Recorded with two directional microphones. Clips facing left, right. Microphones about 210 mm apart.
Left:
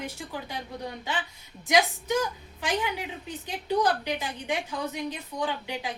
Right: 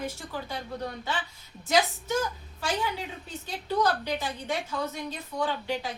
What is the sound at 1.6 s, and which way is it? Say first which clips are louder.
A woman's voice: left 1 dB; 15° left (ahead or behind).